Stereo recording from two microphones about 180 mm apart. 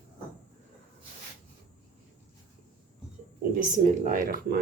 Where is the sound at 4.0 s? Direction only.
50° right (ahead or behind).